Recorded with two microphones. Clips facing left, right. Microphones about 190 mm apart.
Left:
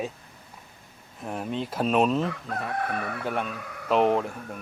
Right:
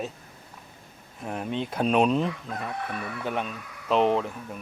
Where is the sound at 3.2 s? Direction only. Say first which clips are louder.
Left 1 dB; 10° left (ahead or behind).